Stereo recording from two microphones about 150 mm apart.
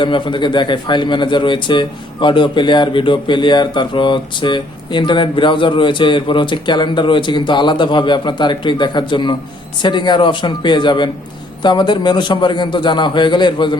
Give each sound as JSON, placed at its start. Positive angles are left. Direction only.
{"t": 0.0, "sound": "speech", "side_deg": 30}